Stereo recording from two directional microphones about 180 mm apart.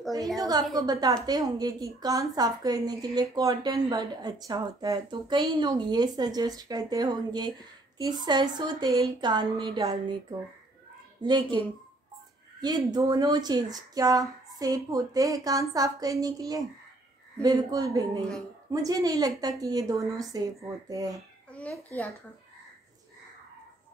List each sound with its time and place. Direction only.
0.4 s a woman's voice: 20° right (ahead or behind)
11.2 s a woman's voice: 25° right (ahead or behind)
21.5 s a child's voice: 5° left (ahead or behind)